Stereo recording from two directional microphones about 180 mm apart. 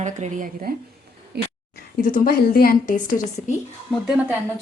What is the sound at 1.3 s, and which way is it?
Speech, 65° right (ahead or behind).